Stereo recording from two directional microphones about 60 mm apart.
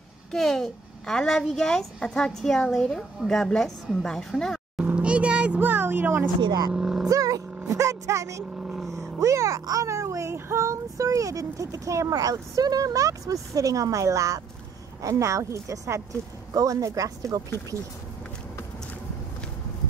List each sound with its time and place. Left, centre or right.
0.3 s a child's voice: centre
4.7 s vehicle: right
5.6 s a sound: right
6.7 s vehicle: centre
7.1 s vehicle: right
7.6 s speech: right
8.5 s speech: centre
8.8 s child singing: right
16.5 s speech: right